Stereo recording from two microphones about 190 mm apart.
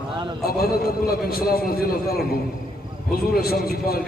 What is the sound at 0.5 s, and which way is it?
A man's voice, 55° left (ahead or behind).